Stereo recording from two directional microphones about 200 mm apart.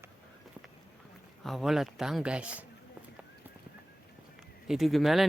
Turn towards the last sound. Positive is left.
turn(degrees=0)  # may be behind; listen again after turning